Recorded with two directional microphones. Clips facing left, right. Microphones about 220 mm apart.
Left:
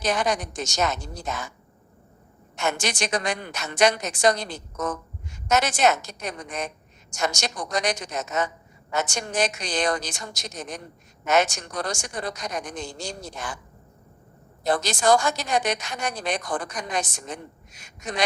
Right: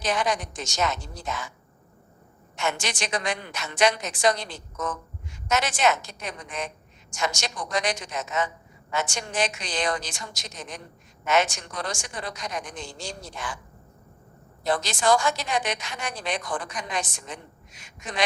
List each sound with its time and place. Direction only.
0.0 s a woman's voice: 40° left (ahead or behind)
2.6 s a woman's voice: 40° left (ahead or behind)
14.6 s a woman's voice: 40° left (ahead or behind)